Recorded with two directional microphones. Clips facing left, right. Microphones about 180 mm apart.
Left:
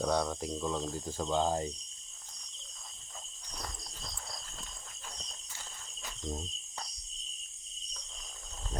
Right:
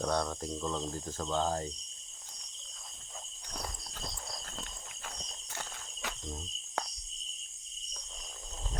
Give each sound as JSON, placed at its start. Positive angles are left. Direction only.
{"t": 0.0, "sound": "speech", "side_deg": 5}
{"t": 5.0, "sound": "walk", "side_deg": -65}